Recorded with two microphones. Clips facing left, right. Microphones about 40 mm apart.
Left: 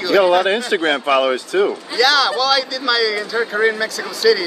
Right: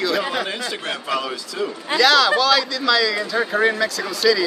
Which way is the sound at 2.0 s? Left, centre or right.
Centre.